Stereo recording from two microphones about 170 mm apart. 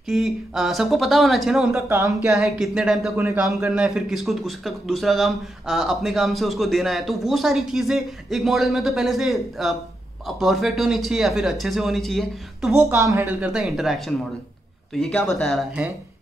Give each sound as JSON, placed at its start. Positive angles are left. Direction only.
{"t": 0.1, "sound": "a man's voice", "side_deg": 0}
{"t": 1.8, "sound": "speech", "side_deg": -15}
{"t": 2.2, "sound": "a man's voice", "side_deg": 0}
{"t": 12.7, "sound": "a man's voice", "side_deg": -15}